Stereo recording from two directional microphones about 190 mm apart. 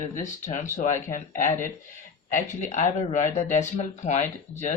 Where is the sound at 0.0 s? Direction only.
40° left (ahead or behind).